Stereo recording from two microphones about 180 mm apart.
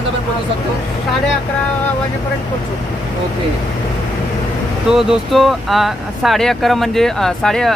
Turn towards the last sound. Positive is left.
turn(degrees=5)  # may be behind; listen again after turning